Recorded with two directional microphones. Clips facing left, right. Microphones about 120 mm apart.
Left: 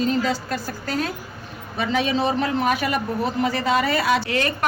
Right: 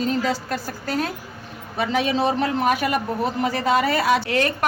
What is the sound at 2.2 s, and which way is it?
Speech, 50° right (ahead or behind).